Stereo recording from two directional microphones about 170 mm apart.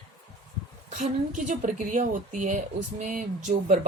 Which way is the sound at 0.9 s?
45° right (ahead or behind).